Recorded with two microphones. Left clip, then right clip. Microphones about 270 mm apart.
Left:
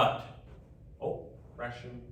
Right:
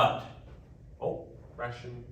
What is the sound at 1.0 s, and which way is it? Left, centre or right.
Speech, centre.